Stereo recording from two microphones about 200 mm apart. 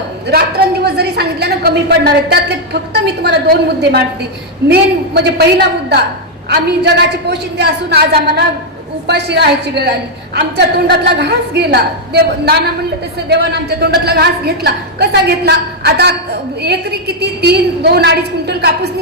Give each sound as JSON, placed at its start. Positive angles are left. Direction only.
{"t": 0.9, "sound": "a woman's voice", "side_deg": -55}